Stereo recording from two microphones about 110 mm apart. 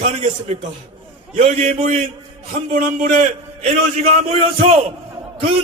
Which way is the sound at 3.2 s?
75° right (ahead or behind).